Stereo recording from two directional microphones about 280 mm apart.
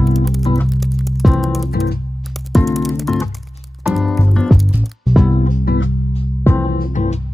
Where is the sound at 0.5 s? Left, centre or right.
Centre.